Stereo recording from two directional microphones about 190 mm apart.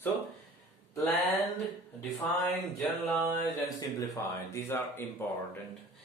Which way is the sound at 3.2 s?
15° left (ahead or behind).